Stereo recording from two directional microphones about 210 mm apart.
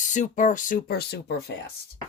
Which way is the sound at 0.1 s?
35° left (ahead or behind).